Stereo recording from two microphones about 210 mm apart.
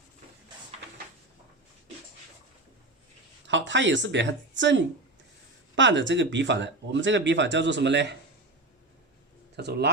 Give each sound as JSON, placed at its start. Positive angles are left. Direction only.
{"t": 3.4, "sound": "speech", "side_deg": -60}
{"t": 9.6, "sound": "speech", "side_deg": -55}